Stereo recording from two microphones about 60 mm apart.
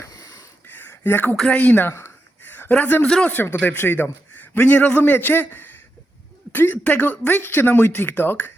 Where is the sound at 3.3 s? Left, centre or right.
Left.